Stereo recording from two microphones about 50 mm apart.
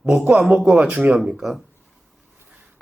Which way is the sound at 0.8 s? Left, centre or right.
Right.